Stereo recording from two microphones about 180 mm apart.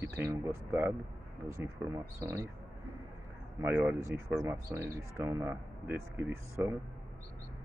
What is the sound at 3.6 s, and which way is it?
Speech, 15° right (ahead or behind).